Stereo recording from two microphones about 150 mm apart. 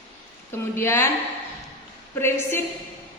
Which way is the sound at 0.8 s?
15° left (ahead or behind).